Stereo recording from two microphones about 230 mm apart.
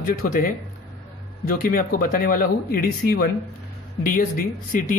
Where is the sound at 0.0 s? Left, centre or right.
Left.